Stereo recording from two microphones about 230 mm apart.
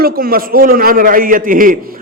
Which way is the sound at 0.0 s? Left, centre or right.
Right.